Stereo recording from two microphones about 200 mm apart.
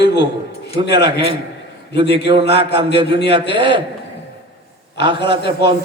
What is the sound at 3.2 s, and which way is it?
Speech, 55° left (ahead or behind).